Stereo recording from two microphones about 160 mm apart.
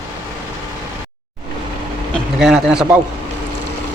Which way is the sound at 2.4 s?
5° right (ahead or behind).